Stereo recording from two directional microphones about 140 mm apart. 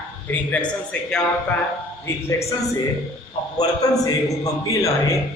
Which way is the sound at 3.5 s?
25° left (ahead or behind).